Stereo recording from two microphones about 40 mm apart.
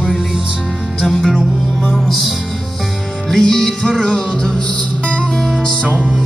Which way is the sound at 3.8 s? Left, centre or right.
Left.